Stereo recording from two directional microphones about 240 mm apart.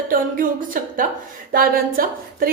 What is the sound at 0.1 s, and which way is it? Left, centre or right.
A woman's voice, right.